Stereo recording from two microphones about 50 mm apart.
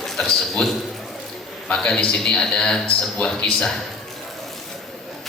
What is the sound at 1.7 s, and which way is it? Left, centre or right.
A man's voice, centre.